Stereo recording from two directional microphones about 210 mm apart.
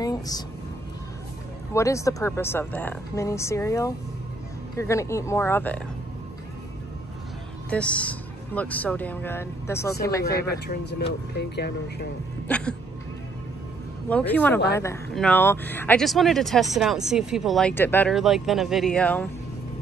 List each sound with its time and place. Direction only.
0.0 s a sound: 20° left (ahead or behind)
1.7 s speech: 15° left (ahead or behind)
7.7 s speech: 5° left (ahead or behind)
10.2 s speech: 50° left (ahead or behind)
12.4 s a sound: 5° left (ahead or behind)
14.0 s speech: 5° left (ahead or behind)
18.1 s speech: centre (ahead or behind)